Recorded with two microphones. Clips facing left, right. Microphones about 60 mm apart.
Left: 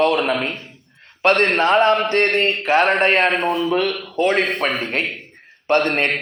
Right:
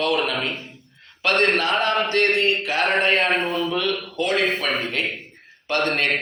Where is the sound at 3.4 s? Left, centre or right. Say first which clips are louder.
Left 4 dB; left.